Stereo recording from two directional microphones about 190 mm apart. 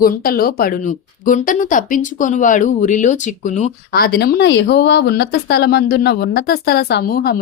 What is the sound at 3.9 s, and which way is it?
Speech, 55° left (ahead or behind).